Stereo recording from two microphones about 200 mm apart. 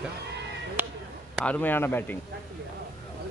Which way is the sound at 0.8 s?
10° right (ahead or behind).